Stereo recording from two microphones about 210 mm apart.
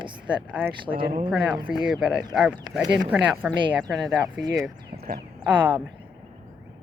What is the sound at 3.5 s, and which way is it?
Speech, 15° right (ahead or behind).